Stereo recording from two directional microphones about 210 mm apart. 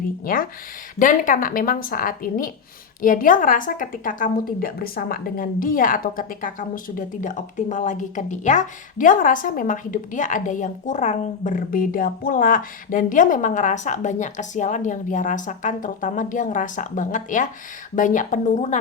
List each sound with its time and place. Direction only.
0.3 s a woman's voice: 40° left (ahead or behind)